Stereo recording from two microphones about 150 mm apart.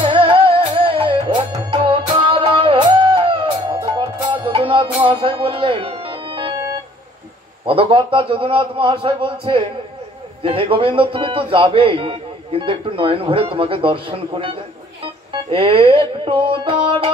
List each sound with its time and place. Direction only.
0.0 s music: 35° right (ahead or behind)
7.6 s speech: 35° right (ahead or behind)